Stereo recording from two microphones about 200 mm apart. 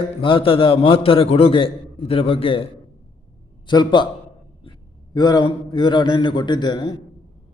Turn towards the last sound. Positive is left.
turn(degrees=20)  # may be behind; listen again after turning